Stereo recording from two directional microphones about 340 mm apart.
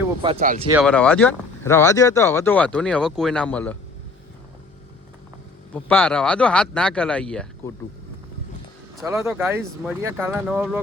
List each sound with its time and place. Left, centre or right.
0.2 s speech: centre
0.7 s speech: centre
5.7 s speech: centre
9.0 s speech: centre